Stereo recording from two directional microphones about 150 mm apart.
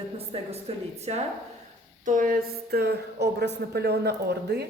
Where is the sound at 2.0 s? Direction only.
60° right (ahead or behind).